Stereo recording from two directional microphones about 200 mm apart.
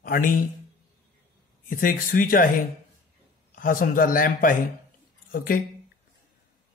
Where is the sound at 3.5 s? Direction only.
45° left (ahead or behind).